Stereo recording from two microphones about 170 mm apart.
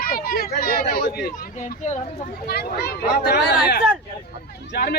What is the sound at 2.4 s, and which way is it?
Speech, 65° left (ahead or behind).